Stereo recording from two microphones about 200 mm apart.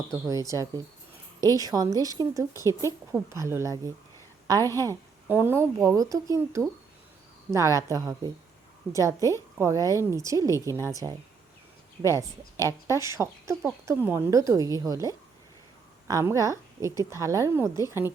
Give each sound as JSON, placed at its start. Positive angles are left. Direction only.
{"t": 0.1, "sound": "a woman's voice", "side_deg": -15}
{"t": 12.0, "sound": "a woman's voice", "side_deg": -15}